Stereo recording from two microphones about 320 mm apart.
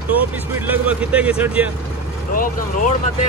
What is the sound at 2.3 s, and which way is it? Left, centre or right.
Speech, left.